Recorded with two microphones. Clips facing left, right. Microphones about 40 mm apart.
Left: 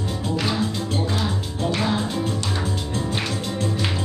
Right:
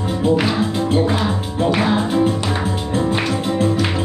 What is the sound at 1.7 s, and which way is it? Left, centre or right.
Music, right.